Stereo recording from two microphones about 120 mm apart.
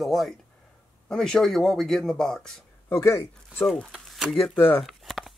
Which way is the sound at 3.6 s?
Centre (ahead or behind).